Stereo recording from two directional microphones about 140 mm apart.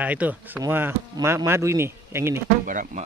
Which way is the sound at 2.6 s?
70° right (ahead or behind).